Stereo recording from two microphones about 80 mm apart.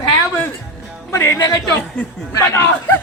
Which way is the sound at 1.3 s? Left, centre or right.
Left.